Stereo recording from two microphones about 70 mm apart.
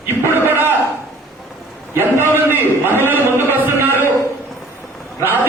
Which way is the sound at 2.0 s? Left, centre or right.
Right.